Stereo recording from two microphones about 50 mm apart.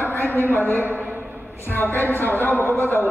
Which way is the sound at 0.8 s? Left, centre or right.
Right.